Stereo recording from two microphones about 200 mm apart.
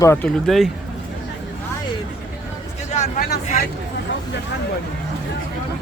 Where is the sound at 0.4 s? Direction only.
Centre (ahead or behind).